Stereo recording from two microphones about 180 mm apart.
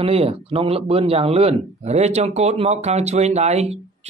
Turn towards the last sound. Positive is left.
turn(degrees=-35)  # may be behind; listen again after turning